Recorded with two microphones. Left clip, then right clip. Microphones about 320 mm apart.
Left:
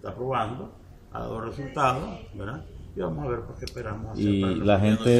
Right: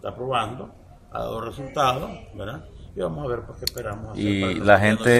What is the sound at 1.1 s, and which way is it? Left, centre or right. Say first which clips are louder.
Speech: right 4 dB; centre.